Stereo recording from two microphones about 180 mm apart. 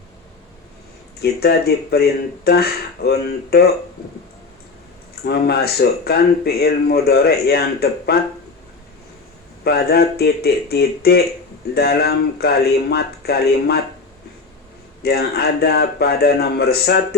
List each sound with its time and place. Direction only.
1.2 s speech: 60° left (ahead or behind)
5.2 s speech: 60° left (ahead or behind)
9.6 s speech: 60° left (ahead or behind)
15.0 s speech: 60° left (ahead or behind)